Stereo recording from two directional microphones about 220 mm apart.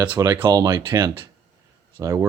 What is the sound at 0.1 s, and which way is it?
Speech, 15° right (ahead or behind).